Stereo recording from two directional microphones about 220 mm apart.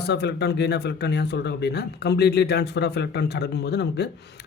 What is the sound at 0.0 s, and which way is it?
Speech, 50° left (ahead or behind).